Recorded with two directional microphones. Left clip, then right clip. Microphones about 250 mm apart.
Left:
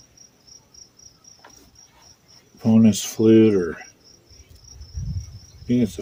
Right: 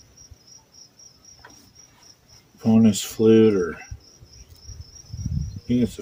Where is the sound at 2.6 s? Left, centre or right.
Left.